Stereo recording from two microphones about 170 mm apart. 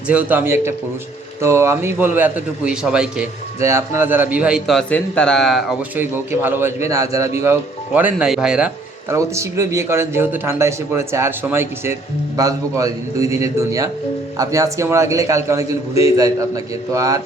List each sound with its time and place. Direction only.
0.1 s a man's voice: 10° right (ahead or behind)
3.6 s a man's voice: 15° right (ahead or behind); by 5.6 s centre (ahead or behind)
6.0 s a man's voice: 10° right (ahead or behind)
9.1 s a man's voice: 15° right (ahead or behind)